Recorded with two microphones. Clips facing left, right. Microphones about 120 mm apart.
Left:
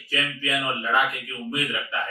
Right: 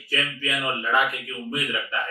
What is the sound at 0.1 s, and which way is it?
Speech, 15° left (ahead or behind).